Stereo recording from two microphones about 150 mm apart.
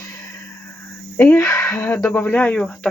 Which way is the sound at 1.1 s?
15° left (ahead or behind).